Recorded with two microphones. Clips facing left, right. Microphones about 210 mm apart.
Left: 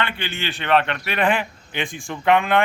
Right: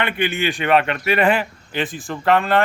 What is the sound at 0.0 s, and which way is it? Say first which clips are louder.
A man's voice: right 6 dB; 15° right (ahead or behind).